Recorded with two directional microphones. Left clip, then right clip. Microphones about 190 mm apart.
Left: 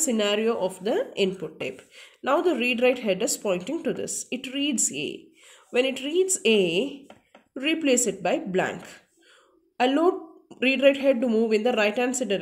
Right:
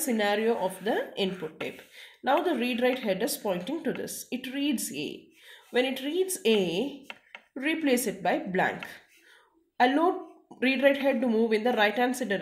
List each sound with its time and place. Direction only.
0.0 s speech: 45° left (ahead or behind)